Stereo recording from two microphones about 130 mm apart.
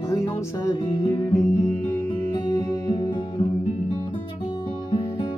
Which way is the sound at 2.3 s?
30° left (ahead or behind).